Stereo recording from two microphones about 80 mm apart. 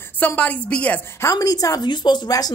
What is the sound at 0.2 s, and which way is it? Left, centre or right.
Speech, centre.